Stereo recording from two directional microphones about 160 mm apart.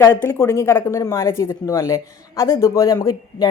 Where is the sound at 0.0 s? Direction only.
20° left (ahead or behind).